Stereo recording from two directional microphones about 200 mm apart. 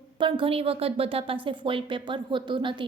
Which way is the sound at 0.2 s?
25° right (ahead or behind).